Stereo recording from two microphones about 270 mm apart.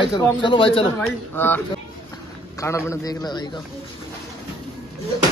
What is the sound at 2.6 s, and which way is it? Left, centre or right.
Speech, centre.